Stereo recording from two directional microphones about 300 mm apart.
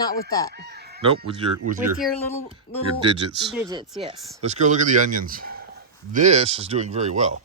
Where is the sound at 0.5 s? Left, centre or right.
Right.